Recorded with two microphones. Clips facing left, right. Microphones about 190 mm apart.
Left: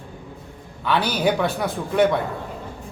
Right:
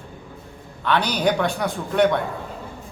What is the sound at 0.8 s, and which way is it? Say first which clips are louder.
A man's voice: even; 5° left (ahead or behind).